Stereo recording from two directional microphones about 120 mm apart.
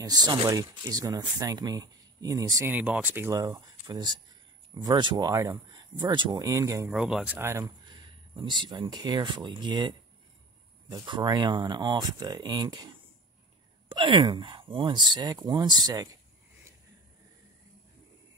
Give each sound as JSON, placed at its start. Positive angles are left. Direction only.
{"t": 0.0, "sound": "speech", "side_deg": -35}
{"t": 2.7, "sound": "speech", "side_deg": -15}
{"t": 3.3, "sound": "speech", "side_deg": -30}
{"t": 6.9, "sound": "speech", "side_deg": -5}
{"t": 7.3, "sound": "speech", "side_deg": -20}
{"t": 7.6, "sound": "speech", "side_deg": -40}